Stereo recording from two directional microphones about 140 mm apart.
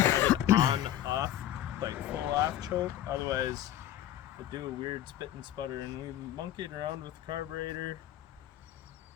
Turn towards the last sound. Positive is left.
turn(degrees=-30)  # may be behind; listen again after turning